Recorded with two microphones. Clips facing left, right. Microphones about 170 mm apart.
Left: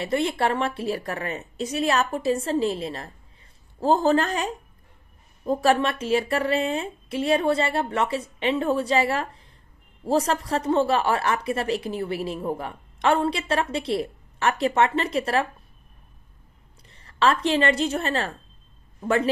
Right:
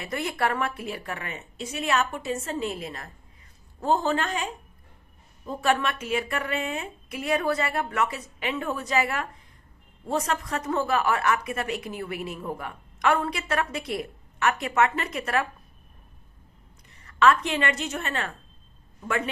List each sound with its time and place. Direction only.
0.0 s a woman's voice: 30° left (ahead or behind)
16.9 s a woman's voice: 30° left (ahead or behind)